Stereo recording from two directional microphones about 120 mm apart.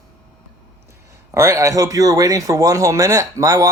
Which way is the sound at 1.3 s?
25° right (ahead or behind).